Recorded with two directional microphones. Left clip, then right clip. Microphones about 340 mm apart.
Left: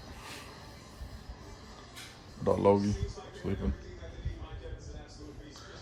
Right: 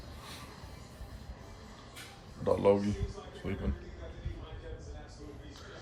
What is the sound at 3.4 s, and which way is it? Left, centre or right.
Speech, centre.